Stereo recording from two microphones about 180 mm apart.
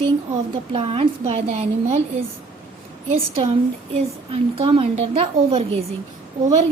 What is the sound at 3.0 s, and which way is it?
A woman's voice, 35° right (ahead or behind).